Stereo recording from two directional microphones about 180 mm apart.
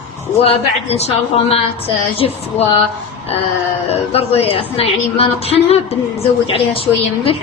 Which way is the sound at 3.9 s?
35° left (ahead or behind).